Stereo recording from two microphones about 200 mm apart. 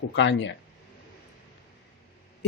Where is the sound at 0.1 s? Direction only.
65° left (ahead or behind).